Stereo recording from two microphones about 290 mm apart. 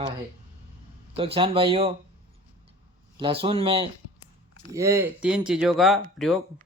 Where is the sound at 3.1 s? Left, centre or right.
Centre.